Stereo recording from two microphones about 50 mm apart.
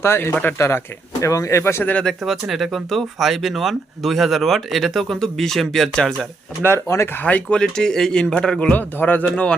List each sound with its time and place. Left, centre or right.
0.0 s speech: left
0.6 s speech: left
1.2 s speech: left
2.2 s speech: centre
6.8 s speech: left
7.2 s speech: left
7.5 s speech: centre
8.5 s speech: left
9.3 s speech: centre